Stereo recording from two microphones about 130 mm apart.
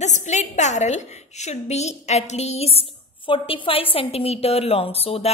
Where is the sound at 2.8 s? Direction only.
45° left (ahead or behind).